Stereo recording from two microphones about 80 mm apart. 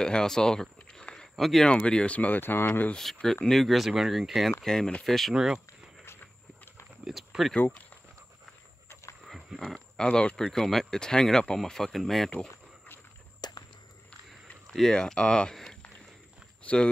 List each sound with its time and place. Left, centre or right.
0.0 s speech: centre
1.7 s speech: centre
3.0 s speech: centre
5.3 s speech: centre
7.1 s speech: centre
7.5 s speech: centre
9.2 s a sound: centre
9.7 s speech: centre
12.4 s cricket: left
13.4 s a sound: left
14.7 s speech: centre